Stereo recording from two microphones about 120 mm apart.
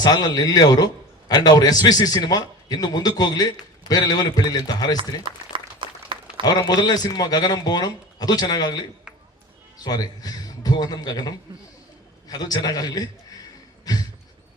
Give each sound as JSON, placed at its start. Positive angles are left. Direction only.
{"t": 0.0, "sound": "a man's voice", "side_deg": 35}
{"t": 5.3, "sound": "speech", "side_deg": -45}
{"t": 5.8, "sound": "a sound", "side_deg": -45}
{"t": 6.4, "sound": "a man's voice", "side_deg": 35}